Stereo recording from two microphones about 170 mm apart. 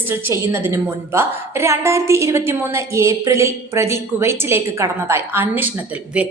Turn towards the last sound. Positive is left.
turn(degrees=-10)  # may be behind; listen again after turning